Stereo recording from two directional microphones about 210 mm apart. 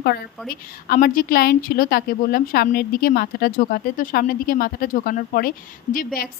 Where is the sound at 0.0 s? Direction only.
45° left (ahead or behind).